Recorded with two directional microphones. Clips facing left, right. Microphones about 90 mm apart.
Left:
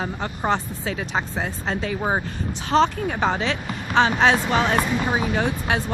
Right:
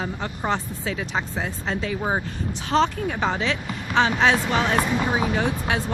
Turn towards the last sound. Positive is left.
turn(degrees=40)  # may be behind; listen again after turning